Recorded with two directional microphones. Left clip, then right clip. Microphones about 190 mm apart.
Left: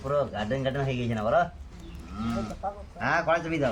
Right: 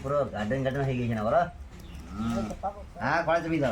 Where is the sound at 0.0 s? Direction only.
10° left (ahead or behind).